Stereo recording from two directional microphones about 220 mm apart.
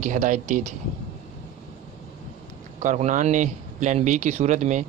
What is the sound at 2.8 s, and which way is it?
Speech, 35° right (ahead or behind).